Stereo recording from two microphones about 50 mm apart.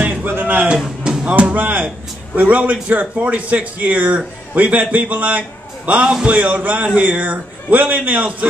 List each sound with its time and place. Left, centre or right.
0.0 s a sound: right
0.3 s speech: right
1.2 s music: right
2.3 s a man's voice: right
5.9 s a man's voice: centre
6.2 s a man's voice: right